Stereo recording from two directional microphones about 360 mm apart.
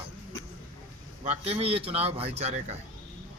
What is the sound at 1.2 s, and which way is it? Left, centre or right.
Speech, centre.